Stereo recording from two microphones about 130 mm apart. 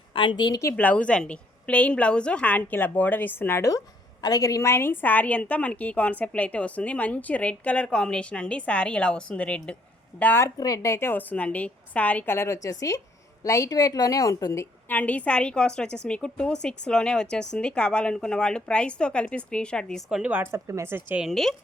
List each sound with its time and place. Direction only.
0.1 s a woman's voice: 40° left (ahead or behind)
0.6 s a woman's voice: 15° left (ahead or behind)
10.6 s a woman's voice: 25° left (ahead or behind); by 20.0 s 5° left (ahead or behind)
20.1 s speech: 5° right (ahead or behind)
21.2 s speech: centre (ahead or behind)